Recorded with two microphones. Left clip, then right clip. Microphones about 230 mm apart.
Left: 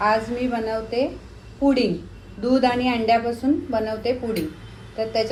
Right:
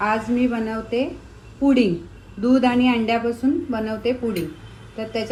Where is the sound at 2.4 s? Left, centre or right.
Right.